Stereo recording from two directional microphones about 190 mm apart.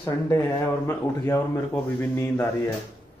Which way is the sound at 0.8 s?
15° left (ahead or behind).